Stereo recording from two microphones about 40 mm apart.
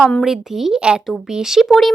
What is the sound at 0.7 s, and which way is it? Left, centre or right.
Speech, right.